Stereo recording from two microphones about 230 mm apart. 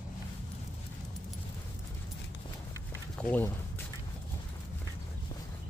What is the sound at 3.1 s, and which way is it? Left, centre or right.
Speech, centre.